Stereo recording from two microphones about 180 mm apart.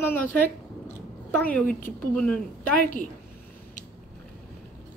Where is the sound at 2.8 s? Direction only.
50° left (ahead or behind).